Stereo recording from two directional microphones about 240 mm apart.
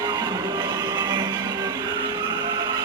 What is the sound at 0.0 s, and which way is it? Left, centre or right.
Music, centre.